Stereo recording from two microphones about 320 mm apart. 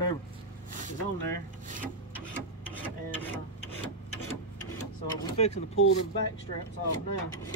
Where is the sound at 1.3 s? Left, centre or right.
Right.